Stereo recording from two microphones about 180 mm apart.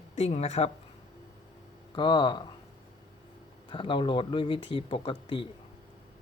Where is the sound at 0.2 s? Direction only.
35° left (ahead or behind).